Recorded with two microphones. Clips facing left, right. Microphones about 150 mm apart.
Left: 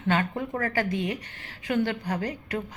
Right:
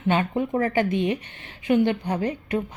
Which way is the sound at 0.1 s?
20° right (ahead or behind).